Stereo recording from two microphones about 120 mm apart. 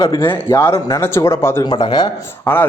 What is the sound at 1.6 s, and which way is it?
Speech, 35° left (ahead or behind).